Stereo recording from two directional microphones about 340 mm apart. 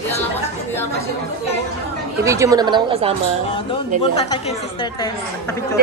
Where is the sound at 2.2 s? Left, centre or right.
Centre.